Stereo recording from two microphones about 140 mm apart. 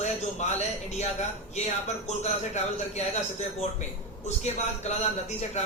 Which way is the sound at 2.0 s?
50° left (ahead or behind).